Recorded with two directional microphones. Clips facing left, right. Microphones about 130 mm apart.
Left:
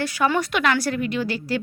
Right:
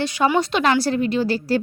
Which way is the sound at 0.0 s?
20° right (ahead or behind).